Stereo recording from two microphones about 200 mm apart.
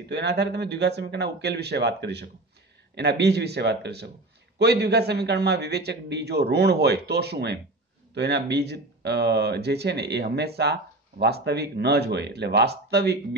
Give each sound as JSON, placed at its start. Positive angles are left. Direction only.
{"t": 0.1, "sound": "speech", "side_deg": -55}